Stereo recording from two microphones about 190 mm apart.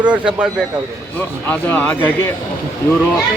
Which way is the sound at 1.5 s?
10° left (ahead or behind).